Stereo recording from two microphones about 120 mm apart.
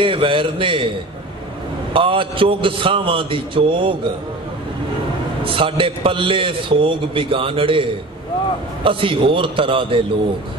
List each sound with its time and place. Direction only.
0.0 s a man's voice: 45° right (ahead or behind)
2.0 s a man's voice: 45° right (ahead or behind)
5.4 s a man's voice: 45° right (ahead or behind)